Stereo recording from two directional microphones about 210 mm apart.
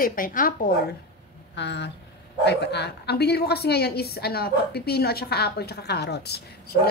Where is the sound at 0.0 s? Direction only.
40° left (ahead or behind).